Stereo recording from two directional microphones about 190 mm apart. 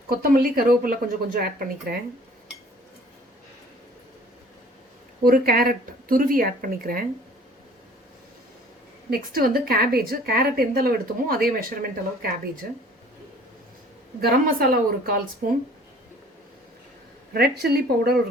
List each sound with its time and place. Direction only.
0.1 s a woman's voice: 50° right (ahead or behind)
5.2 s a woman's voice: 50° right (ahead or behind)
9.0 s a woman's voice: 50° right (ahead or behind)
14.2 s a woman's voice: 50° right (ahead or behind)
17.3 s speech: 55° right (ahead or behind)